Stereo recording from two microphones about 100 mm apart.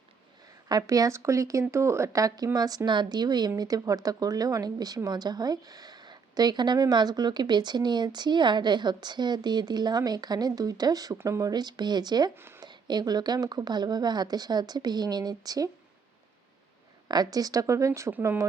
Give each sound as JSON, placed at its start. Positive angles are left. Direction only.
{"t": 0.7, "sound": "speech", "side_deg": -35}
{"t": 17.1, "sound": "speech", "side_deg": -40}